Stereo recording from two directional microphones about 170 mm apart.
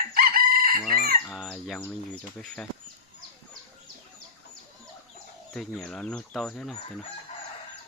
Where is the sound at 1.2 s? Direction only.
5° left (ahead or behind).